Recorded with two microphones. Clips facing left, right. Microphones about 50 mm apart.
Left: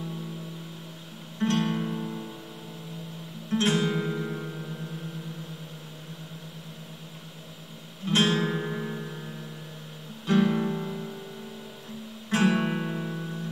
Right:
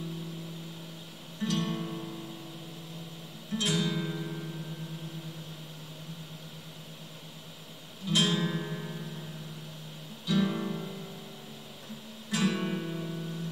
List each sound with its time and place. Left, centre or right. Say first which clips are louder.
1.4 s music: left 6 dB; left
3.5 s music: left 6 dB; left
8.0 s music: left 4 dB; left
10.2 s music: left 6 dB; left
12.3 s guitar: left 6 dB; left